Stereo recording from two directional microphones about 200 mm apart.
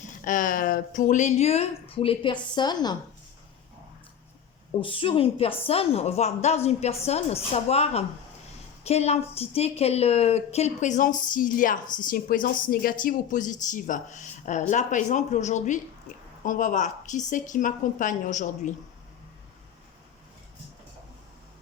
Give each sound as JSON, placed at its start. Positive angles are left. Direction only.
{"t": 0.3, "sound": "a woman's voice", "side_deg": 40}
{"t": 4.8, "sound": "a woman's voice", "side_deg": 25}